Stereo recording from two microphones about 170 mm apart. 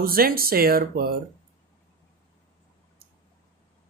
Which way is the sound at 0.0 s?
60° right (ahead or behind).